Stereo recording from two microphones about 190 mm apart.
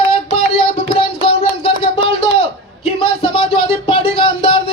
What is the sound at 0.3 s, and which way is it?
Music, 30° left (ahead or behind).